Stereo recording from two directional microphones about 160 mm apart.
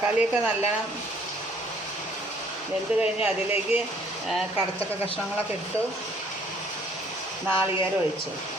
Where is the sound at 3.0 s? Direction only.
10° right (ahead or behind).